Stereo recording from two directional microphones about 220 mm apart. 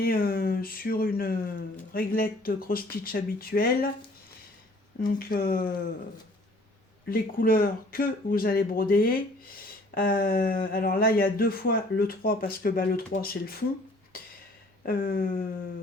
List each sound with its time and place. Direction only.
0.0 s speech: 40° left (ahead or behind)
4.9 s speech: 40° left (ahead or behind)
7.1 s speech: 40° left (ahead or behind)
14.8 s speech: 40° left (ahead or behind)